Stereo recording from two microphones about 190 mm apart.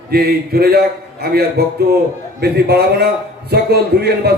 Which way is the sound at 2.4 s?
55° right (ahead or behind).